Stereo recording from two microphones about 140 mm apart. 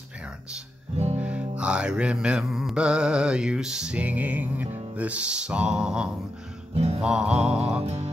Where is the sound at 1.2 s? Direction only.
10° right (ahead or behind).